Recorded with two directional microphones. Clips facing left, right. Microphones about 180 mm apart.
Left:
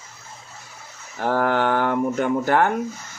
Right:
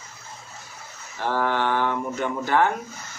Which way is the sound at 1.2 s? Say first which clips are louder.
Left 4 dB; 50° left (ahead or behind).